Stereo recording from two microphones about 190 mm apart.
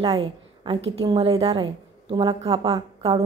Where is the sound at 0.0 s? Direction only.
30° right (ahead or behind).